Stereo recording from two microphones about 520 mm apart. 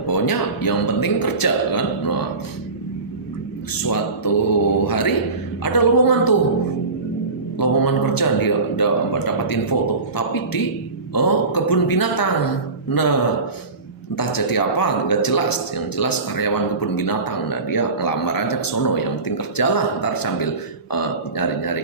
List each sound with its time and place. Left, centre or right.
0.1 s a man's voice: left
3.8 s a man's voice: left
7.6 s a man's voice: left
14.2 s a man's voice: left